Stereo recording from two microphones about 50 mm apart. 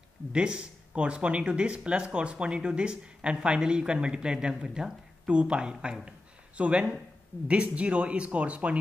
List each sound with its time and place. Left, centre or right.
0.3 s speech: centre